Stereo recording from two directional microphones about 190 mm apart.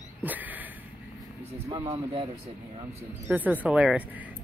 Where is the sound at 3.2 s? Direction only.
10° right (ahead or behind).